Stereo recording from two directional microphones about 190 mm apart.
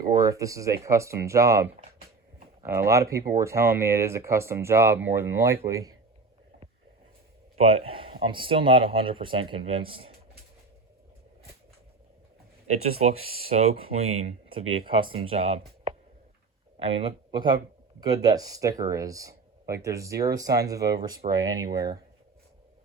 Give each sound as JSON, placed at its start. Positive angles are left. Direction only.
{"t": 0.1, "sound": "speech", "side_deg": -20}
{"t": 7.5, "sound": "speech", "side_deg": -30}
{"t": 13.6, "sound": "speech", "side_deg": -30}